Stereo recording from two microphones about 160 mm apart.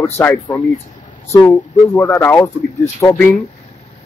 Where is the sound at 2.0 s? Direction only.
15° left (ahead or behind).